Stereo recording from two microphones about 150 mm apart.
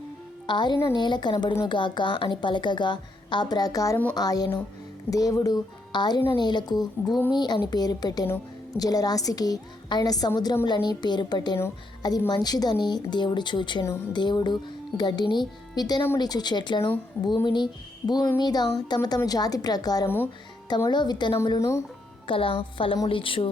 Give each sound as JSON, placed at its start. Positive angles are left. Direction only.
{"t": 0.4, "sound": "a woman's voice", "side_deg": 30}
{"t": 20.1, "sound": "speech", "side_deg": 15}
{"t": 20.7, "sound": "a woman's voice", "side_deg": 30}
{"t": 22.3, "sound": "a woman's voice", "side_deg": 35}